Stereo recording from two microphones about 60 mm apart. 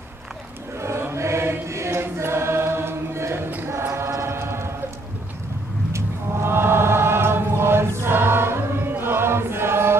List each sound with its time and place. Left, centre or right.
0.7 s choir: right
4.2 s train: right
5.9 s chant: right